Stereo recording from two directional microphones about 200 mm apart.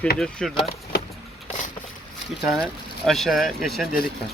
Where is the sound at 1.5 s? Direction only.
40° left (ahead or behind).